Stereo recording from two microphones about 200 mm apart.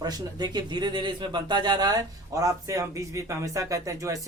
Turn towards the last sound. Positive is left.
turn(degrees=-15)  # may be behind; listen again after turning